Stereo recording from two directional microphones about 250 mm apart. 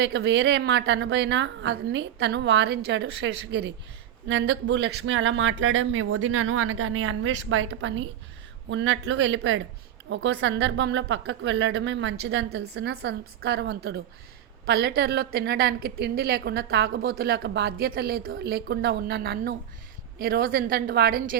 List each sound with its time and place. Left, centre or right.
0.0 s a woman's voice: right